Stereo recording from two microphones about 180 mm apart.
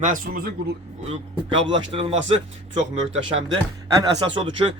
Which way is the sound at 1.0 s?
30° right (ahead or behind).